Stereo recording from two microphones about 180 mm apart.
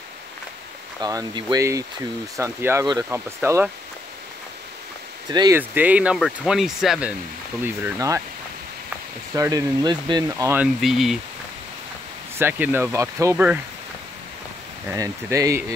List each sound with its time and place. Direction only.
1.0 s speech: 20° right (ahead or behind)
5.3 s speech: 20° right (ahead or behind)
5.6 s speech: 10° right (ahead or behind)
9.3 s speech: 20° right (ahead or behind); by 11.1 s centre (ahead or behind)
12.4 s speech: 10° right (ahead or behind)
14.9 s speech: 15° right (ahead or behind)